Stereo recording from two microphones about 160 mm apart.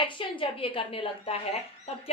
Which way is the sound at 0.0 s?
30° left (ahead or behind).